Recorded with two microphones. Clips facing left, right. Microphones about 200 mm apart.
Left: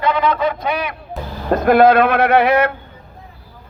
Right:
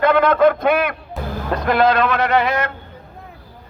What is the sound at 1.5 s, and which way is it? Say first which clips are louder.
Speech: left 6 dB; 50° left (ahead or behind).